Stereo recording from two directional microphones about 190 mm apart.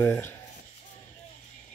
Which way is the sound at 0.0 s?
10° left (ahead or behind).